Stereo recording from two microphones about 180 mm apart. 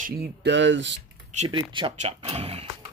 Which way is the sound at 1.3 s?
40° right (ahead or behind).